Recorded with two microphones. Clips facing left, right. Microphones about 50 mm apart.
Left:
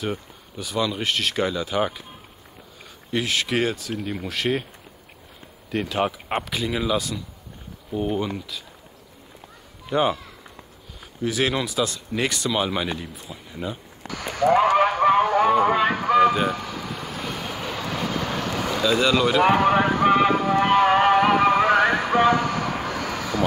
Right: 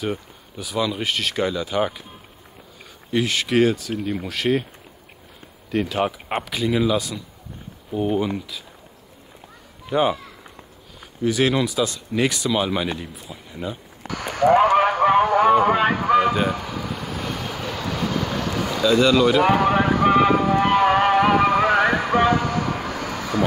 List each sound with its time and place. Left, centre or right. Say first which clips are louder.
0.0 s speech: right 2 dB; centre
3.1 s speech: right 2 dB; centre
5.7 s speech: right 2 dB; centre
9.8 s speech: right 2 dB; centre
11.2 s speech: right 4 dB; centre
14.0 s basketball bounce: right 3 dB; right
14.7 s a sound: right 1 dB; centre
15.3 s vehicle: right 2 dB; centre
18.9 s a sound: right 4 dB; centre
22.3 s vehicle: right 1 dB; centre